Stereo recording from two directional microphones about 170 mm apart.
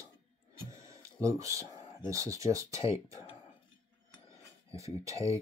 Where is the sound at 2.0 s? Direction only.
20° right (ahead or behind).